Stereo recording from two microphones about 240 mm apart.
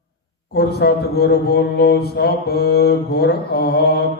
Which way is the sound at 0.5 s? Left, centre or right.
Left.